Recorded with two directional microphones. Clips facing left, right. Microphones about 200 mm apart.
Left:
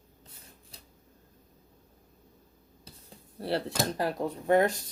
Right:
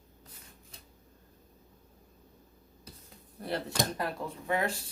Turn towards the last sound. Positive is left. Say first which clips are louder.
# left 8 dB
turn(degrees=40)  # may be behind; listen again after turning